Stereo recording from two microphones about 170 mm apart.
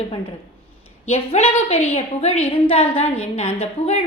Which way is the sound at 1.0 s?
40° left (ahead or behind).